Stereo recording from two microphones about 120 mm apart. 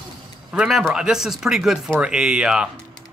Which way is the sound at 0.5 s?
5° right (ahead or behind).